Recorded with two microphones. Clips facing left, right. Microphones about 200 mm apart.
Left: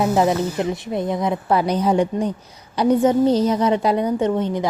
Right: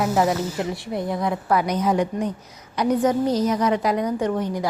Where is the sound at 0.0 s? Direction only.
20° left (ahead or behind).